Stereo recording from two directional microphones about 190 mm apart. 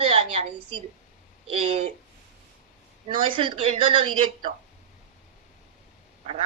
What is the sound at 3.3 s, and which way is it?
Speech, 30° right (ahead or behind).